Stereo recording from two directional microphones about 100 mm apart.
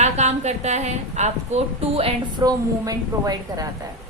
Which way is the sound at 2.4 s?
40° right (ahead or behind).